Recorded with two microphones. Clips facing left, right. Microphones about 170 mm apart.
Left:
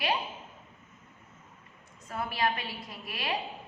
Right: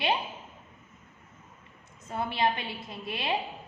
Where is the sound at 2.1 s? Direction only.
25° right (ahead or behind).